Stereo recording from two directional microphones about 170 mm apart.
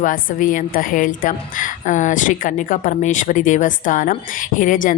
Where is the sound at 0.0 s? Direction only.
55° left (ahead or behind).